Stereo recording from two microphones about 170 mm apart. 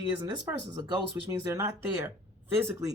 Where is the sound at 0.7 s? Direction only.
20° right (ahead or behind).